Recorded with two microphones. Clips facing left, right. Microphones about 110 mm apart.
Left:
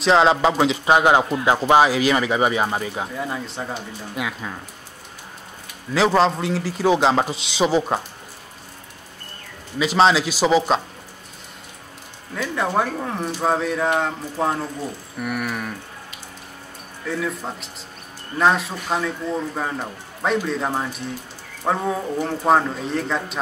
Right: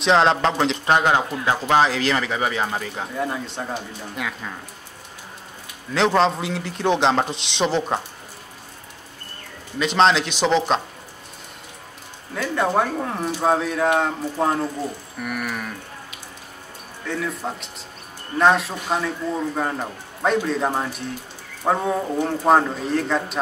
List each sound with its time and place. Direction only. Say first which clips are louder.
0.0 s speech: left 1 dB; centre (ahead or behind)
3.2 s a man's voice: right 1 dB; centre (ahead or behind)
5.9 s a man's voice: left 1 dB; centre (ahead or behind)
9.8 s a man's voice: left 1 dB; 5° left (ahead or behind)
12.4 s a man's voice: right 1 dB; centre (ahead or behind)
17.0 s a man's voice: left 1 dB; centre (ahead or behind)